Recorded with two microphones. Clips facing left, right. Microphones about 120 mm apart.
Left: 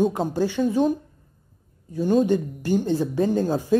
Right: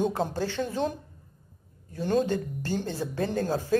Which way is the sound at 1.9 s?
10° left (ahead or behind).